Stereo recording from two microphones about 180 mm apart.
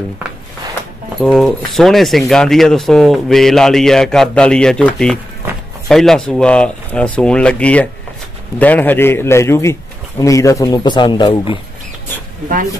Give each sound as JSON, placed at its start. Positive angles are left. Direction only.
{"t": 1.2, "sound": "a man's voice", "side_deg": 0}